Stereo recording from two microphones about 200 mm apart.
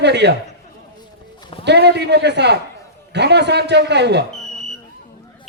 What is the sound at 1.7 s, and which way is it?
A man's voice, 55° right (ahead or behind).